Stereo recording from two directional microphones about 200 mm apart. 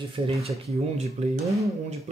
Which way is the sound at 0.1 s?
30° right (ahead or behind).